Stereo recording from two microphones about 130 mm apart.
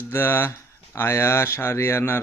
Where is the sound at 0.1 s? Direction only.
15° left (ahead or behind).